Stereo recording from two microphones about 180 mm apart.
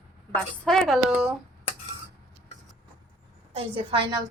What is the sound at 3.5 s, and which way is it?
Speech, 30° right (ahead or behind).